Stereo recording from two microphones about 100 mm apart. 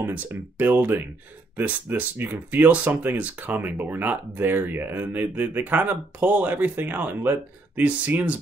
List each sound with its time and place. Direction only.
0.0 s speech: 15° right (ahead or behind)